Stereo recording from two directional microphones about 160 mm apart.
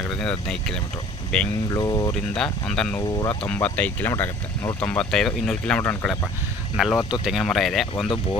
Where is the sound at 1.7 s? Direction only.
20° left (ahead or behind).